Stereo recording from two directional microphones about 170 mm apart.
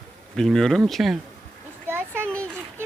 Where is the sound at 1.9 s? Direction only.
15° right (ahead or behind).